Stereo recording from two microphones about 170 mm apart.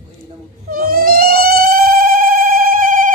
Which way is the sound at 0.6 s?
55° right (ahead or behind).